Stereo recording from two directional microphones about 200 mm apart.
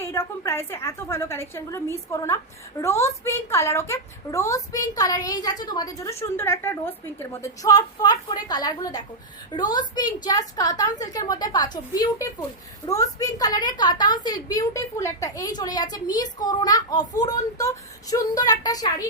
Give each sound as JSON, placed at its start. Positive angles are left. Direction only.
{"t": 0.0, "sound": "a woman's voice", "side_deg": 10}